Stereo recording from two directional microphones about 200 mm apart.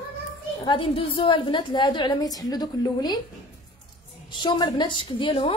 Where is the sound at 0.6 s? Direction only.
25° left (ahead or behind).